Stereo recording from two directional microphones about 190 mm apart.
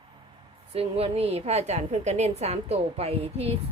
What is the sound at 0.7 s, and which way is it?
A woman's voice, 30° right (ahead or behind).